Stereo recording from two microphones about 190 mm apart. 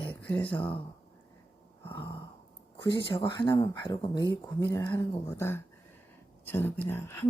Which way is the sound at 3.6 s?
20° left (ahead or behind).